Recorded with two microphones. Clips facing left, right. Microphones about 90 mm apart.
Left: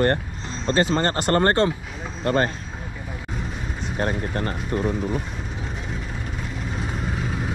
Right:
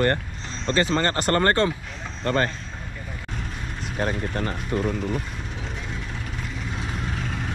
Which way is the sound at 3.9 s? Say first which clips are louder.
Left 1 dB; 5° left (ahead or behind).